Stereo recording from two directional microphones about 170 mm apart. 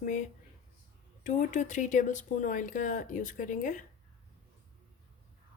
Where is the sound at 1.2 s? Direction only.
50° left (ahead or behind).